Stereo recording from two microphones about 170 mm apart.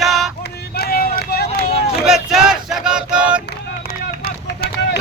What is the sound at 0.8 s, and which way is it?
Vehicle, 60° left (ahead or behind).